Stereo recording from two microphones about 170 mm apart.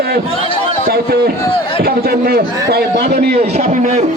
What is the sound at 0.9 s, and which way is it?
A man's voice, 70° right (ahead or behind).